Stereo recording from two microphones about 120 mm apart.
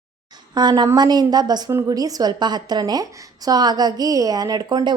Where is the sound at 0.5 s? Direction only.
35° right (ahead or behind).